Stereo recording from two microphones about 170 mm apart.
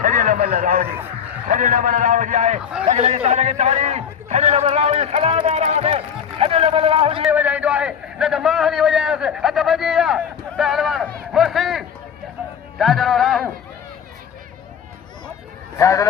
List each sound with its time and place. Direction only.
0.0 s a sound: 50° right (ahead or behind)
1.5 s a man's voice: 50° right (ahead or behind); by 7.3 s 35° right (ahead or behind)
7.3 s a man's voice: 10° right (ahead or behind)
11.3 s a sound: centre (ahead or behind)
12.4 s music: 5° right (ahead or behind)
12.8 s a man's voice: centre (ahead or behind)
15.8 s a man's voice: 20° left (ahead or behind)